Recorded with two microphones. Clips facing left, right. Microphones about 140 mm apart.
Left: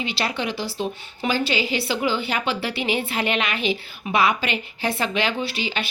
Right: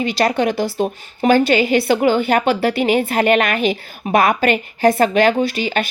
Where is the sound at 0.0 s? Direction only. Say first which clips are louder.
Right 9 dB; 45° right (ahead or behind).